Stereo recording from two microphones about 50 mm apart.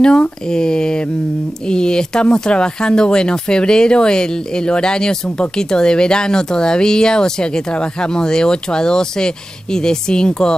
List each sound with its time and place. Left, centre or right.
0.0 s speech: centre